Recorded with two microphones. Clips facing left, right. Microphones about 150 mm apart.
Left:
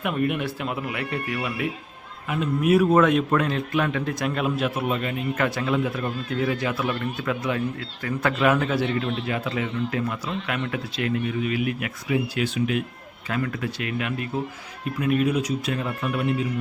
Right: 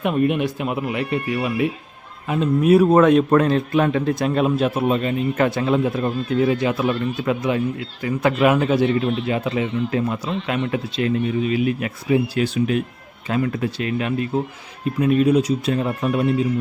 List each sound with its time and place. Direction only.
0.0 s a man's voice: 25° right (ahead or behind)
13.2 s a man's voice: 25° right (ahead or behind)